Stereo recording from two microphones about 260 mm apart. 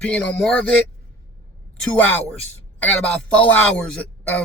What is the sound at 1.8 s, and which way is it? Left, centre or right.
A man's voice, centre.